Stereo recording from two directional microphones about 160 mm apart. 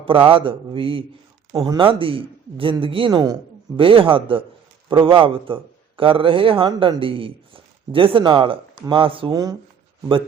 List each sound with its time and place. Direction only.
0.0 s a man's voice: 35° right (ahead or behind)